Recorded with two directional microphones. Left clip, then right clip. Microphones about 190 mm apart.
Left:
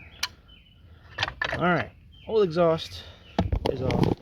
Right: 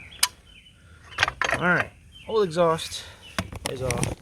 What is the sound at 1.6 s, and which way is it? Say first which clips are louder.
Speech: right 2 dB; 25° left (ahead or behind).